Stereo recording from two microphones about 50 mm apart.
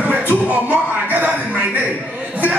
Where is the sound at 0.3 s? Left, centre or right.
Right.